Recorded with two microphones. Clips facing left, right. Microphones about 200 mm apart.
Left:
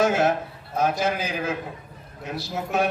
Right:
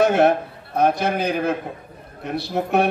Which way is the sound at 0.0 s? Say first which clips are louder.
Right 5 dB; 60° right (ahead or behind).